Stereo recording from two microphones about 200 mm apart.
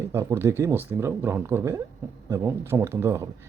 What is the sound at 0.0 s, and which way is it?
Speech, 15° right (ahead or behind).